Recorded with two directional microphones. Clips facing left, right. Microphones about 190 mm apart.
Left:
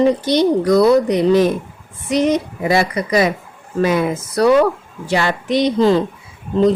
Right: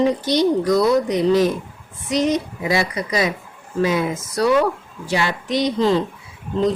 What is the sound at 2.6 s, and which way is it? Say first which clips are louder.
Speech: left 5 dB; 55° left (ahead or behind).